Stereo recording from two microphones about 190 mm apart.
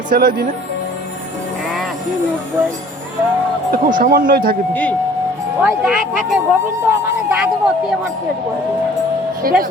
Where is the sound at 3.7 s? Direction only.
45° right (ahead or behind).